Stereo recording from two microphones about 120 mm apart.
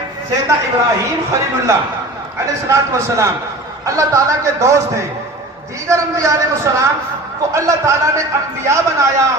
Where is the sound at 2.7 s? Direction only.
25° right (ahead or behind).